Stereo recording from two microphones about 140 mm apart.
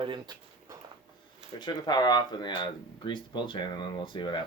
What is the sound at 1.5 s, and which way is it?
Speech, 30° left (ahead or behind).